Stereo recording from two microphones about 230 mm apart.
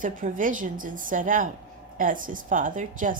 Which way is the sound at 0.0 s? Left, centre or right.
Right.